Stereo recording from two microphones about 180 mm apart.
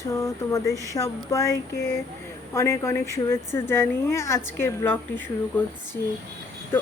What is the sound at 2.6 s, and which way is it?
Speech, 15° left (ahead or behind).